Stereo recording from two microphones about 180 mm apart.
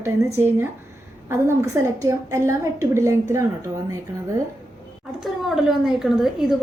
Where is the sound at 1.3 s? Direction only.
15° right (ahead or behind).